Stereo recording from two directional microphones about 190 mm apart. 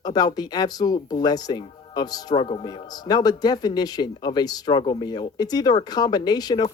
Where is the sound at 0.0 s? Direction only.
20° left (ahead or behind).